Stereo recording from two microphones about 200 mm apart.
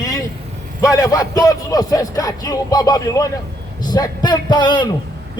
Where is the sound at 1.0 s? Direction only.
20° left (ahead or behind).